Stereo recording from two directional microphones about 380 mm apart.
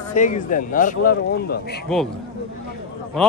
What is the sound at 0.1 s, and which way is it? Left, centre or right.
Speech, centre.